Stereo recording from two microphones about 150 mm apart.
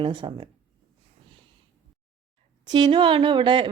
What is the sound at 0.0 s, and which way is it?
Speech, 35° right (ahead or behind).